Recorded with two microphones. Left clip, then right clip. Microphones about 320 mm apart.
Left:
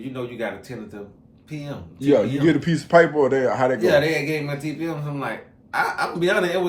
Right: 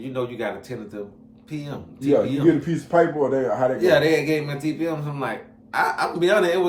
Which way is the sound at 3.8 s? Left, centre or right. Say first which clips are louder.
Right 1 dB; centre.